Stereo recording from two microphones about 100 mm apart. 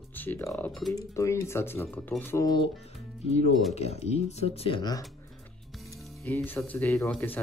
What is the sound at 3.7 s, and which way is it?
Speech, 90° left.